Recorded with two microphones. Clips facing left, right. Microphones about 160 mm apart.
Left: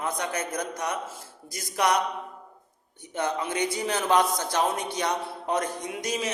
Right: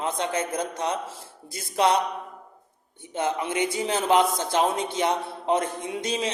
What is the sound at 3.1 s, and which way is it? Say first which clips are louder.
A man's voice: right 2 dB; 20° right (ahead or behind).